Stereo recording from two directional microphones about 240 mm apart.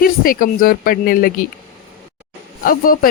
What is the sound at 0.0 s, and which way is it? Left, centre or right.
A woman's voice, left.